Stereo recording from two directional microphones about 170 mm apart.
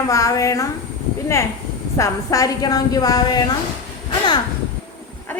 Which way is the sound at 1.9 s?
20° left (ahead or behind).